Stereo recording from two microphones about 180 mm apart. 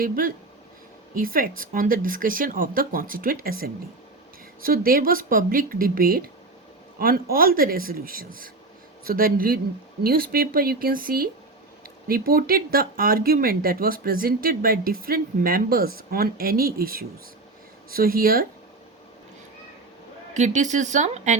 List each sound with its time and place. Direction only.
0.0 s speech: 50° right (ahead or behind)
20.3 s speech: 40° right (ahead or behind)